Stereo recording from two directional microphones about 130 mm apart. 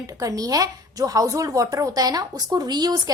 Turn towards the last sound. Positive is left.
turn(degrees=-30)  # may be behind; listen again after turning